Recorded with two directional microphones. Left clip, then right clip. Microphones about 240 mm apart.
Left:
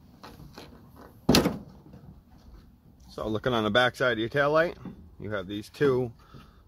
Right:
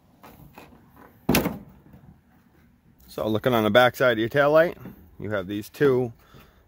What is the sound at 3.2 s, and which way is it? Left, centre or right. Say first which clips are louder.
Speech: right 5 dB; right.